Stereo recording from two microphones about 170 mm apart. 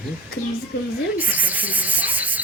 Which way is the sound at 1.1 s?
10° right (ahead or behind).